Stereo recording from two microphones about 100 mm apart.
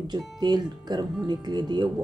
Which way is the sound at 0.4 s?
45° right (ahead or behind).